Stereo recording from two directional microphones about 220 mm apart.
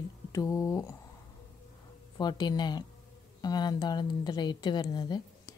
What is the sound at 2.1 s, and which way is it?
Speech, 20° left (ahead or behind).